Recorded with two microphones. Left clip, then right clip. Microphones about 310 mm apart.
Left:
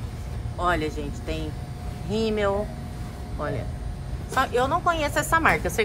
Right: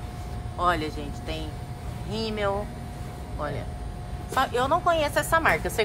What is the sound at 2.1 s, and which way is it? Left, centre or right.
Speech, right.